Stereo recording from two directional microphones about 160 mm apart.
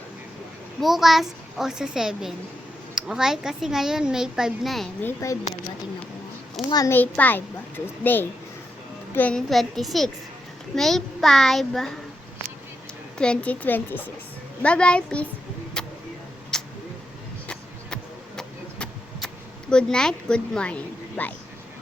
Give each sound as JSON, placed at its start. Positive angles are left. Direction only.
{"t": 0.8, "sound": "a woman's voice", "side_deg": 0}
{"t": 5.0, "sound": "speech", "side_deg": 20}
{"t": 6.7, "sound": "speech", "side_deg": 25}
{"t": 6.9, "sound": "a woman's voice", "side_deg": 10}
{"t": 13.1, "sound": "speech", "side_deg": 5}
{"t": 15.8, "sound": "a sound", "side_deg": 5}
{"t": 17.5, "sound": "vehicle", "side_deg": 5}
{"t": 19.7, "sound": "a woman's voice", "side_deg": 5}